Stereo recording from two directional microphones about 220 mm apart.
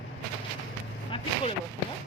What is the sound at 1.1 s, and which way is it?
Speech, 25° left (ahead or behind).